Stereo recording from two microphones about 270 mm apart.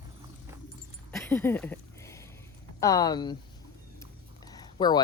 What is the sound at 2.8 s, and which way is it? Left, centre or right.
Speech, centre.